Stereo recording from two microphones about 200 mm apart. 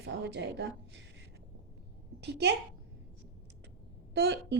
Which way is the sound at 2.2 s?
55° right (ahead or behind).